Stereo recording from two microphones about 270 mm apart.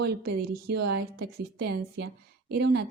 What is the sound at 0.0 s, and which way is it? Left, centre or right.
A woman's voice, right.